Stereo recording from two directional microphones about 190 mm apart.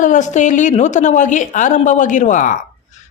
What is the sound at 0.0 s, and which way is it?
A woman's voice, 40° left (ahead or behind).